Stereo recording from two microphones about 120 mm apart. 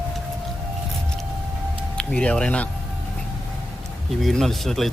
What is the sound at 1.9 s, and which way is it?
Speech, 10° left (ahead or behind).